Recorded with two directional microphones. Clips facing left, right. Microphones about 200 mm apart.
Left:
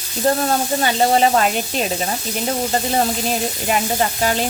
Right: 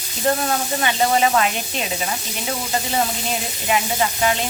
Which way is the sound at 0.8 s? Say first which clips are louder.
Left 2 dB; 35° left (ahead or behind).